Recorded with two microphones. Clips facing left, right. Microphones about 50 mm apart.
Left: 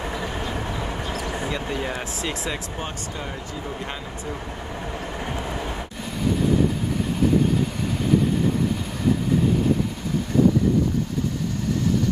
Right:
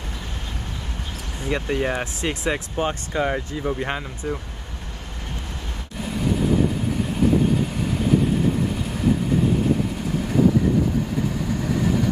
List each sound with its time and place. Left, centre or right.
1.5 s speech: right
2.8 s speech: right
6.0 s vehicle: centre
7.8 s vehicle: centre